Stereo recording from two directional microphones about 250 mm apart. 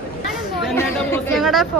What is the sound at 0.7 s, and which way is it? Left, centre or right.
Speech, centre.